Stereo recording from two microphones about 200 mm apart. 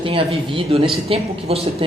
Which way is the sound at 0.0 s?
25° right (ahead or behind).